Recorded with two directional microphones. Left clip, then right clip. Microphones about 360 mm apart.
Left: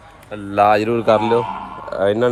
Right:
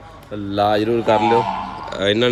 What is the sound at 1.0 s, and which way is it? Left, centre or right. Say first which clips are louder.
A man's voice: even; centre.